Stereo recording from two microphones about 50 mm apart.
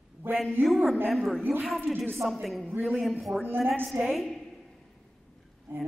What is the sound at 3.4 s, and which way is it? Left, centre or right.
Speech, right.